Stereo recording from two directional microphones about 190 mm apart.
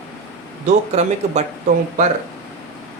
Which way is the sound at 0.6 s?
35° right (ahead or behind).